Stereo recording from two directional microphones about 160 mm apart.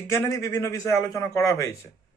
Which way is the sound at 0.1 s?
20° left (ahead or behind).